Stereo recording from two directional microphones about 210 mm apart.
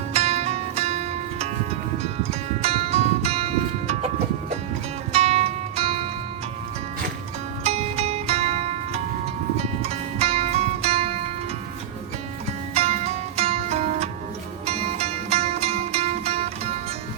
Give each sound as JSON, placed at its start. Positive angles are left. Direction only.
{"t": 0.1, "sound": "music", "side_deg": -30}
{"t": 7.6, "sound": "music", "side_deg": -30}
{"t": 12.7, "sound": "music", "side_deg": -30}